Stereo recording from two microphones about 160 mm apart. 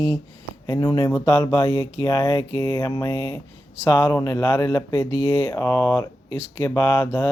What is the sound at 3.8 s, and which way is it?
Speech, 15° left (ahead or behind).